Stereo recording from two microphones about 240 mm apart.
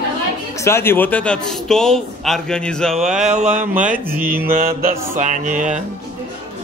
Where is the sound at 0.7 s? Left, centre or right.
Centre.